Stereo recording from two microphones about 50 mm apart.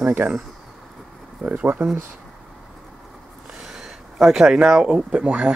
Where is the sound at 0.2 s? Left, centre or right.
Right.